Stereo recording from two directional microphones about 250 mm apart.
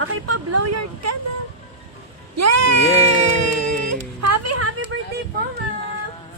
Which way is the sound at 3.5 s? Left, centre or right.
Right.